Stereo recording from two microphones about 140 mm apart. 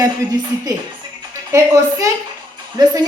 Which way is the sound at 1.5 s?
20° right (ahead or behind).